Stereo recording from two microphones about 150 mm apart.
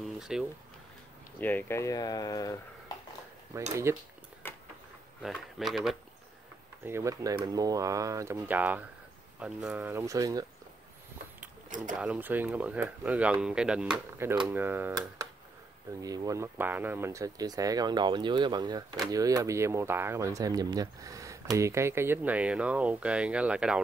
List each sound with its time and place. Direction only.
0.0 s a sound: 5° right (ahead or behind)
1.4 s speech: 10° left (ahead or behind)
3.5 s speech: 20° right (ahead or behind)
4.4 s a sound: 15° left (ahead or behind)
5.2 s speech: centre (ahead or behind)
6.8 s speech: 15° right (ahead or behind)
11.7 s speech: 60° right (ahead or behind)
12.0 s speech: 10° right (ahead or behind)
16.0 s speech: 25° right (ahead or behind); by 23.8 s 5° right (ahead or behind)